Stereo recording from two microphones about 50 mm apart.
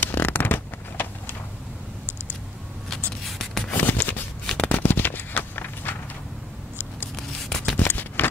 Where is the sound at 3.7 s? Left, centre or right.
Left.